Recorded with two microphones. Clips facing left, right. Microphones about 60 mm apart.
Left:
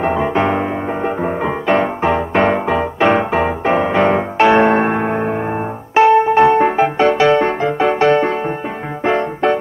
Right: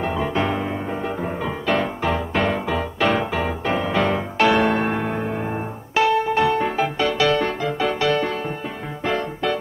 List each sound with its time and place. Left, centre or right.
0.0 s music: left